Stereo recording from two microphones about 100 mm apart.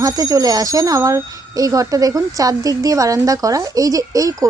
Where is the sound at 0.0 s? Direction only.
35° right (ahead or behind).